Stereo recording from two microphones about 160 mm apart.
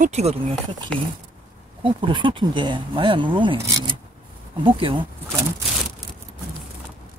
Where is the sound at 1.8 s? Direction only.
30° right (ahead or behind).